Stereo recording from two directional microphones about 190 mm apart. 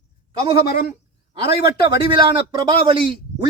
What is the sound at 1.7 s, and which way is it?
A man's voice, 25° right (ahead or behind).